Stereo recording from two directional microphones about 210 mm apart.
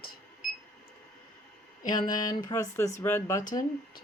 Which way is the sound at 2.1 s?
20° left (ahead or behind).